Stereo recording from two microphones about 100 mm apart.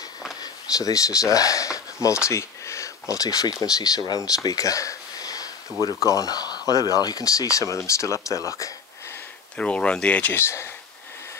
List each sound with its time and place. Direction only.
0.4 s speech: 35° left (ahead or behind)
2.2 s a sound: 30° left (ahead or behind)
3.6 s speech: 35° left (ahead or behind)
9.6 s speech: 10° left (ahead or behind); by 10.7 s 25° left (ahead or behind)